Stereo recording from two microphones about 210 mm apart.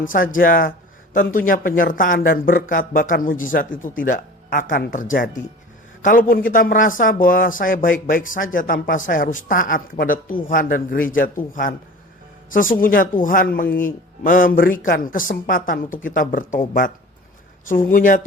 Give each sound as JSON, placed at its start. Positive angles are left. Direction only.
{"t": 0.0, "sound": "speech", "side_deg": 40}